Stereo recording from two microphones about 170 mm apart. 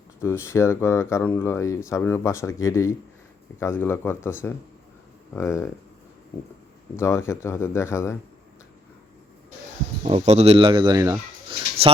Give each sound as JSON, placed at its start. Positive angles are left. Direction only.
{"t": 0.2, "sound": "speech", "side_deg": 15}
{"t": 6.9, "sound": "speech", "side_deg": 15}
{"t": 10.0, "sound": "speech", "side_deg": -40}